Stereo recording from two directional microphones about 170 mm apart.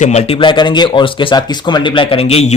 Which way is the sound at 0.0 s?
40° left (ahead or behind).